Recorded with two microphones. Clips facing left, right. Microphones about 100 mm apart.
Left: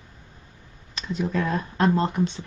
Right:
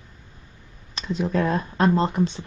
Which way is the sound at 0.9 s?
35° right (ahead or behind).